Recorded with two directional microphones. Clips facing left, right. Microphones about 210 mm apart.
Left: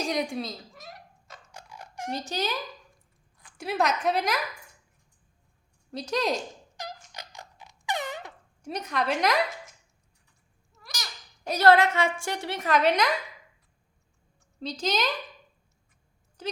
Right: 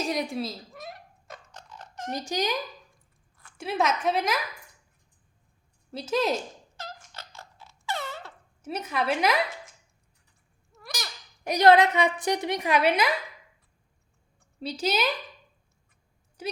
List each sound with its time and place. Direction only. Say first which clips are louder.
0.0 s a woman's voice: even; centre (ahead or behind)
0.8 s a sound: right 5 dB; 55° right (ahead or behind)
1.5 s a sound: left 4 dB; 10° left (ahead or behind)
2.1 s a woman's voice: right 3 dB; 15° right (ahead or behind)
3.6 s a woman's voice: even; centre (ahead or behind)
5.9 s a woman's voice: right 2 dB; 5° right (ahead or behind)
6.7 s dog: left 2 dB; 15° left (ahead or behind)
8.6 s a woman's voice: right 1 dB; 5° right (ahead or behind)
11.4 s a woman's voice: right 1 dB; 15° right (ahead or behind)
14.6 s a woman's voice: right 1 dB; 10° right (ahead or behind)
16.4 s speech: even; 10° right (ahead or behind)